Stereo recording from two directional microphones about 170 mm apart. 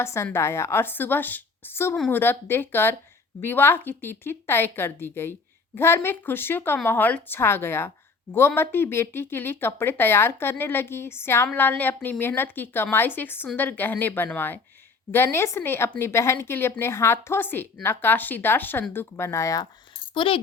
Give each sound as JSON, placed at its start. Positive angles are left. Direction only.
{"t": 0.0, "sound": "a woman's voice", "side_deg": 15}
{"t": 20.1, "sound": "a woman's voice", "side_deg": 30}